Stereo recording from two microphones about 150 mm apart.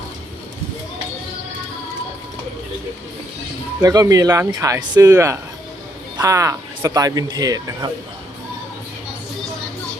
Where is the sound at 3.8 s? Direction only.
25° right (ahead or behind).